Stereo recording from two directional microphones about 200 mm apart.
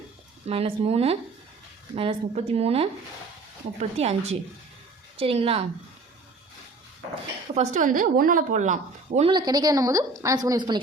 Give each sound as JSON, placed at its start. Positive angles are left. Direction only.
{"t": 0.4, "sound": "a woman's voice", "side_deg": -30}
{"t": 7.5, "sound": "a woman's voice", "side_deg": -35}
{"t": 9.3, "sound": "a woman's voice", "side_deg": -20}